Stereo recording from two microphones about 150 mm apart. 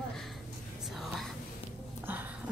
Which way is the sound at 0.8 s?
Centre (ahead or behind).